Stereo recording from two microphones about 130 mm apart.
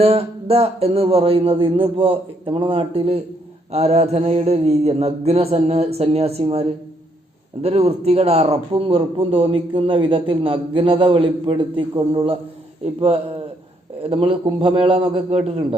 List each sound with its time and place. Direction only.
0.0 s speech: 50° right (ahead or behind)